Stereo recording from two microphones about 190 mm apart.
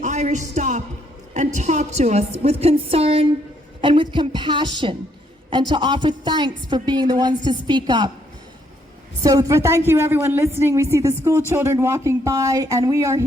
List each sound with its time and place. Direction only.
0.0 s a woman's voice: 40° right (ahead or behind); by 8.1 s 25° right (ahead or behind)
9.2 s a woman's voice: 15° right (ahead or behind)